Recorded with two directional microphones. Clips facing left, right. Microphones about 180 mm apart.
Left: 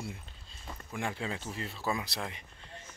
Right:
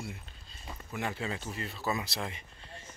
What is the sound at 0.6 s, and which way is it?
Speech, 5° right (ahead or behind).